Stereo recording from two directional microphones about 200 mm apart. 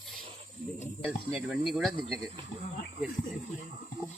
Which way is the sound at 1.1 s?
5° right (ahead or behind).